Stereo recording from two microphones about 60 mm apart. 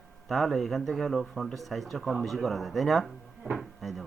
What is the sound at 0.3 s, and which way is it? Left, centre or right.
Speech, centre.